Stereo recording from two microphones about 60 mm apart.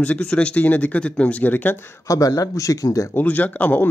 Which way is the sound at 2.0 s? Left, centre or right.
Left.